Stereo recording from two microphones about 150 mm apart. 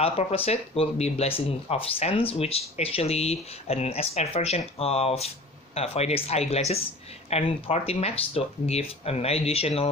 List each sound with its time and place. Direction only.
0.0 s speech: 40° left (ahead or behind)